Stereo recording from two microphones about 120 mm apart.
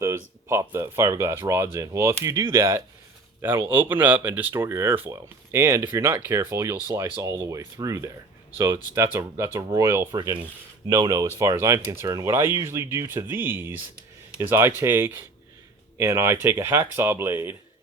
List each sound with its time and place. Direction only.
0.4 s speech: 20° right (ahead or behind)
10.1 s speech: 35° right (ahead or behind); by 17.6 s 20° right (ahead or behind)